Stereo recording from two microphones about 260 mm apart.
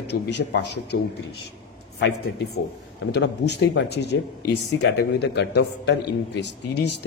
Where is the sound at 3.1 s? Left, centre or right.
Left.